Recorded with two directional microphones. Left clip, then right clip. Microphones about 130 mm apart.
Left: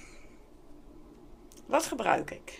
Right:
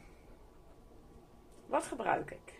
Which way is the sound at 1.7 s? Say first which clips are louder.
Left 6 dB; 30° left (ahead or behind).